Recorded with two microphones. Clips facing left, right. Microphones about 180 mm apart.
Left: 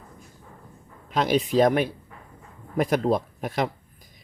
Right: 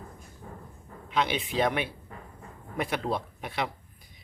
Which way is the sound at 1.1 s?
40° left (ahead or behind).